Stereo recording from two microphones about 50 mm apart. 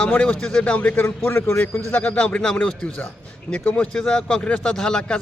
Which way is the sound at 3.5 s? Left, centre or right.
Left.